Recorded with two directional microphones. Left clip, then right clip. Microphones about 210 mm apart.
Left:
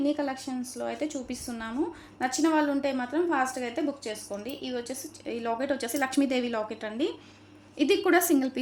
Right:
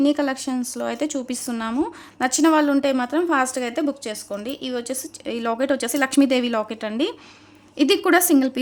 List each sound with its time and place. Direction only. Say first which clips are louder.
0.0 s a woman's voice: right 8 dB; 50° right (ahead or behind)